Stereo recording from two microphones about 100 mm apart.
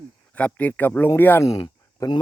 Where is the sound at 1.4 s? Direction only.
35° left (ahead or behind).